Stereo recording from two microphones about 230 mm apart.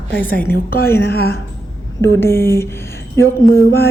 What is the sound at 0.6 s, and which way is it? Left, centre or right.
Speech, left.